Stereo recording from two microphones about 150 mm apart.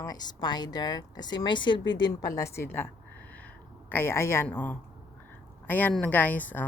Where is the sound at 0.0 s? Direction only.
25° left (ahead or behind).